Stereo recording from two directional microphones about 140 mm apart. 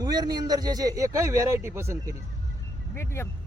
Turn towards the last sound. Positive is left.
turn(degrees=15)  # may be behind; listen again after turning